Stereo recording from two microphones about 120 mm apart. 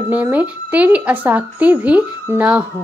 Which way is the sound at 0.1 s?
15° right (ahead or behind).